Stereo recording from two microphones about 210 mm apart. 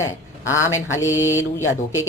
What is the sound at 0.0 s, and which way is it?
Speech, 15° left (ahead or behind).